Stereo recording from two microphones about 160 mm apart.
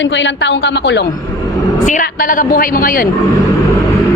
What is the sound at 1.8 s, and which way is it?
A woman's voice, 55° left (ahead or behind).